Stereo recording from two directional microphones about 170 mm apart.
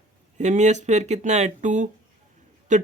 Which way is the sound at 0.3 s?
45° right (ahead or behind).